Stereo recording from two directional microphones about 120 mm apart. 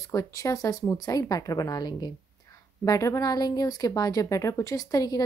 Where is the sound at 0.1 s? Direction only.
25° left (ahead or behind).